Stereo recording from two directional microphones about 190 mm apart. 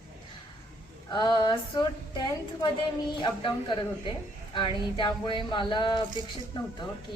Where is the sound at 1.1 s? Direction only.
25° left (ahead or behind).